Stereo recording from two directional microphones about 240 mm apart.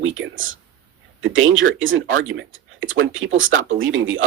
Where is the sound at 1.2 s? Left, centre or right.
Right.